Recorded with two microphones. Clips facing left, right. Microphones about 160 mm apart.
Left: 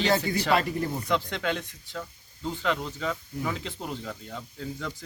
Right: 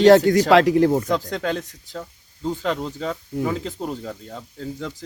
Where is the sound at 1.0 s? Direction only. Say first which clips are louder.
Right 5 dB; 40° right (ahead or behind).